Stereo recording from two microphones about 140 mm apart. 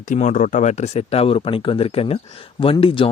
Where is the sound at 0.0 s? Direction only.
60° left (ahead or behind).